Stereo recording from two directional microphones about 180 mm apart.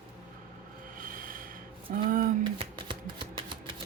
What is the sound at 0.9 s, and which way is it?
Rub, 50° right (ahead or behind).